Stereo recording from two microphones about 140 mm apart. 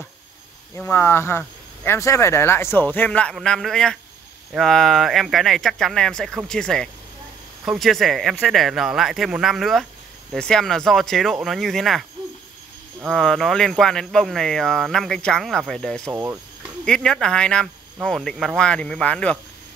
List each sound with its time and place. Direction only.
0.7 s a man's voice: 15° left (ahead or behind)
4.6 s cricket: centre (ahead or behind)
13.1 s cricket: 5° left (ahead or behind)
16.1 s speech: 15° right (ahead or behind)
16.8 s cricket: 5° left (ahead or behind)